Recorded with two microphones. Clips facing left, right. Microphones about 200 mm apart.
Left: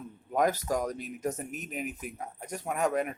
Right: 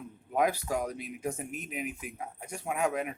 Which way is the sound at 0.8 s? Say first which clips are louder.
Left 2 dB; 40° left (ahead or behind).